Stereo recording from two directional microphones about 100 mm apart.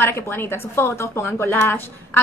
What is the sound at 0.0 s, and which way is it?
A woman's voice, 25° left (ahead or behind).